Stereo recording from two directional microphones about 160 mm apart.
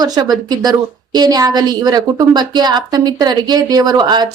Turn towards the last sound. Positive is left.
turn(degrees=-25)  # may be behind; listen again after turning